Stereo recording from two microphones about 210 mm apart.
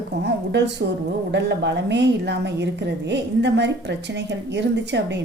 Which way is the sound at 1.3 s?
55° right (ahead or behind).